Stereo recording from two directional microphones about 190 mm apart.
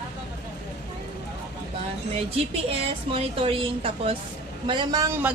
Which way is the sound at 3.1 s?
30° right (ahead or behind).